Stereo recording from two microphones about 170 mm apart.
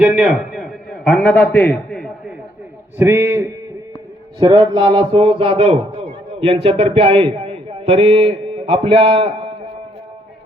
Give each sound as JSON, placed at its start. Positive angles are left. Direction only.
{"t": 0.0, "sound": "a man's voice", "side_deg": -5}
{"t": 3.0, "sound": "a man's voice", "side_deg": -15}
{"t": 4.4, "sound": "a man's voice", "side_deg": -25}